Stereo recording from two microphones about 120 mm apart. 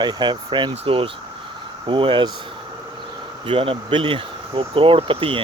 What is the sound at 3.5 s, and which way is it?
Speech, 45° right (ahead or behind).